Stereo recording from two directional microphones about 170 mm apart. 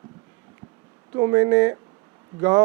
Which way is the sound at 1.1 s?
15° right (ahead or behind).